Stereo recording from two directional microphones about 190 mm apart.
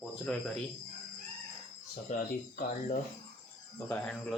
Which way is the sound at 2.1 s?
40° left (ahead or behind).